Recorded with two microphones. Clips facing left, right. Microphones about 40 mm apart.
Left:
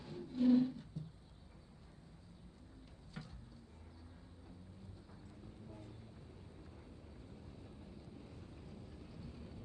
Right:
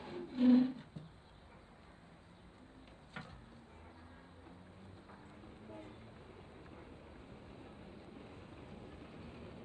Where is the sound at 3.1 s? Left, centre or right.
Right.